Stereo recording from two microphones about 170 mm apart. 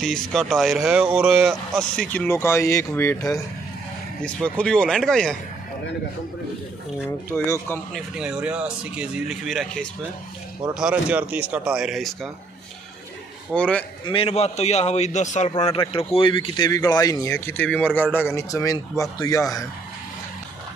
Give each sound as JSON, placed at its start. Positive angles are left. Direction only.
{"t": 0.0, "sound": "speech", "side_deg": 0}
{"t": 7.9, "sound": "speech", "side_deg": -5}
{"t": 13.5, "sound": "a man's voice", "side_deg": 5}
{"t": 14.0, "sound": "a man's voice", "side_deg": 35}
{"t": 15.5, "sound": "speech", "side_deg": 30}